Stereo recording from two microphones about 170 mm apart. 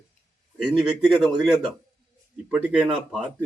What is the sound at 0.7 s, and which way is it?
Speech, 5° right (ahead or behind).